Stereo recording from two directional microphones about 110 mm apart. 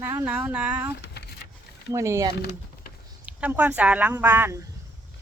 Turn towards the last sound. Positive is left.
turn(degrees=-20)  # may be behind; listen again after turning